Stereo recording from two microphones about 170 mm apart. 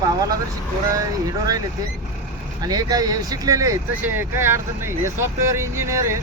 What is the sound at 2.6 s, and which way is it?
Speech, 20° right (ahead or behind).